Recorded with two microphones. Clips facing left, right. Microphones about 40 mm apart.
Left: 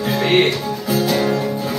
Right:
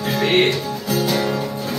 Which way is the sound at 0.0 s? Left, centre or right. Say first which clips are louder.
Left 1 dB; centre.